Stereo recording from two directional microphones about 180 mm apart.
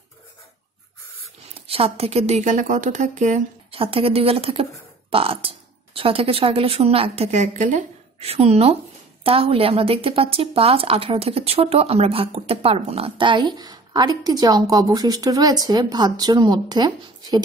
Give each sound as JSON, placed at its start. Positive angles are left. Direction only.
{"t": 1.5, "sound": "a woman's voice", "side_deg": -35}